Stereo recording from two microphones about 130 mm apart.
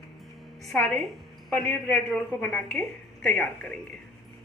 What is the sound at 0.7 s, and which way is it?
A woman's voice, 5° left (ahead or behind).